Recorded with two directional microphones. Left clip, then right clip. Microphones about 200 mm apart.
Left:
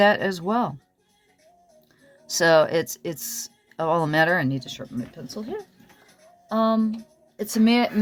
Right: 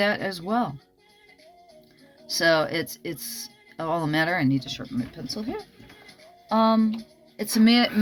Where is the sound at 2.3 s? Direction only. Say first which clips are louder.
Left 4 dB; 55° left (ahead or behind); by 6.8 s 20° left (ahead or behind).